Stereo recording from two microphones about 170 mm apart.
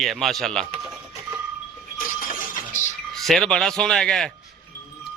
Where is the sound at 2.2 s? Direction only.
50° left (ahead or behind).